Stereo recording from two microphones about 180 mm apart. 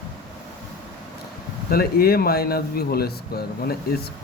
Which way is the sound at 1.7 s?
55° left (ahead or behind).